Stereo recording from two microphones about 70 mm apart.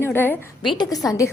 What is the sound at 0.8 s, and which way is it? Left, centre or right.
Speech, left.